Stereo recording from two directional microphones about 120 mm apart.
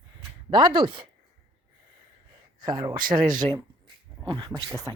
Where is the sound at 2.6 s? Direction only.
35° right (ahead or behind).